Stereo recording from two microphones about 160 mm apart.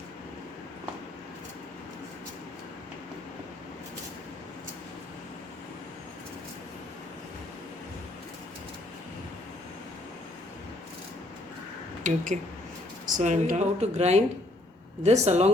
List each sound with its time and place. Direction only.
12.0 s speech: 50° right (ahead or behind)